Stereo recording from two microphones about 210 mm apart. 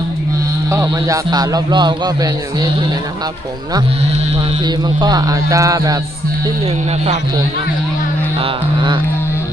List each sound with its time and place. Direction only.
0.7 s a man's voice: 15° right (ahead or behind)
4.6 s music: 20° right (ahead or behind)
8.4 s a man's voice: 20° right (ahead or behind)